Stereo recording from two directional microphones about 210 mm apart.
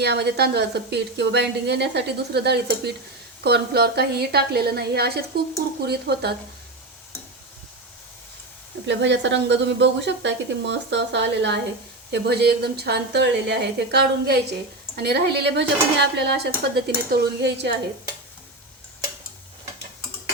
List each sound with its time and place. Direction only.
0.0 s a woman's voice: 50° right (ahead or behind)
8.9 s a woman's voice: 55° right (ahead or behind)